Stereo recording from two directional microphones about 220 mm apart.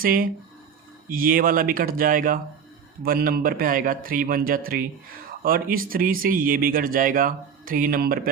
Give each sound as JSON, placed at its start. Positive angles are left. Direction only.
{"t": 0.0, "sound": "speech", "side_deg": -40}